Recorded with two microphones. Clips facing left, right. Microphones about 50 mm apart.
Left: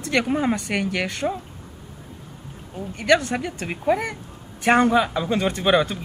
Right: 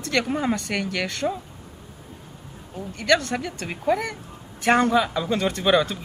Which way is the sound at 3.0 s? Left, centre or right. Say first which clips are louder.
Left 2 dB; centre.